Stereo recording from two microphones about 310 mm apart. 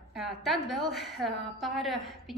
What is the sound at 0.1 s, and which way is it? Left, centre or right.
A woman's voice, centre.